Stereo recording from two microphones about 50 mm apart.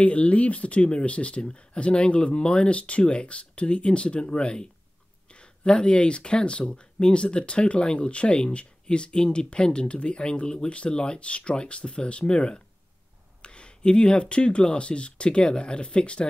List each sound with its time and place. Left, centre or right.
0.0 s speech: left